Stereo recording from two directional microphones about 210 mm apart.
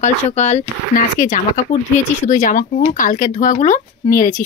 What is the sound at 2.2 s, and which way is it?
Speech, 40° left (ahead or behind).